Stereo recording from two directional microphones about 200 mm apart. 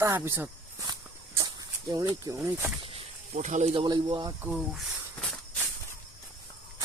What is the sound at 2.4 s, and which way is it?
Speech, 5° right (ahead or behind).